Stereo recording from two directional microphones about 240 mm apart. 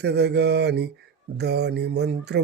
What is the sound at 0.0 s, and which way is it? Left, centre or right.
Mantra, right.